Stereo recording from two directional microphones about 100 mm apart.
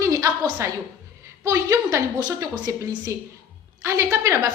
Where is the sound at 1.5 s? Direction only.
30° right (ahead or behind).